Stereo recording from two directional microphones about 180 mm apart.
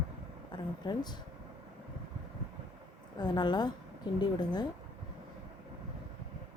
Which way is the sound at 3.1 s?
25° left (ahead or behind).